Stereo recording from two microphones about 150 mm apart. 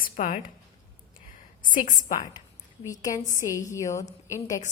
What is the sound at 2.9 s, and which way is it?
A woman's voice, 25° left (ahead or behind).